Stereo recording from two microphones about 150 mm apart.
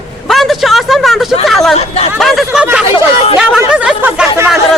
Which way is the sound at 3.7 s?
5° right (ahead or behind).